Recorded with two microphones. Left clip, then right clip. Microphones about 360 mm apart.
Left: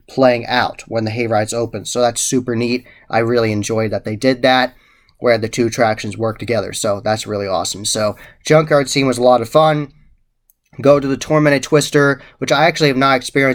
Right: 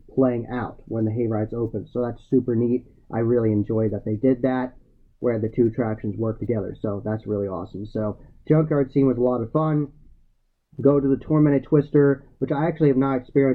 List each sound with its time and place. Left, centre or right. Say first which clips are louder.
0.2 s speech: left 10 dB; centre
9.2 s speech: left 11 dB; left
9.6 s speech: left 12 dB; centre
10.8 s speech: left 7 dB; centre